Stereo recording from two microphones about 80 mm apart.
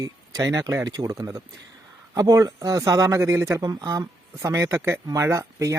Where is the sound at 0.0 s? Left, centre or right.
Right.